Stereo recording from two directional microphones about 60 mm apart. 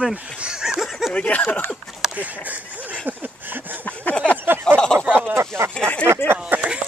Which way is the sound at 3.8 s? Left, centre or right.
Left.